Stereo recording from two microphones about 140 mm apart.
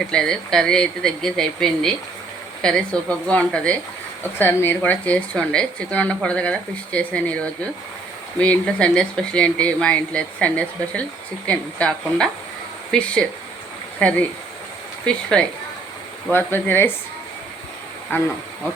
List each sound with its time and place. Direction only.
0.0 s speech: 5° left (ahead or behind)
18.1 s speech: 15° left (ahead or behind)